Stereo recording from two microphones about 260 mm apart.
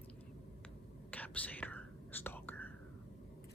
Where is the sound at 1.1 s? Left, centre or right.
Centre.